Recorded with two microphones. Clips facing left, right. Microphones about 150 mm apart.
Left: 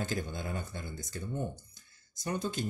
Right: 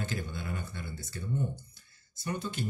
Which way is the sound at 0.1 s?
40° left (ahead or behind).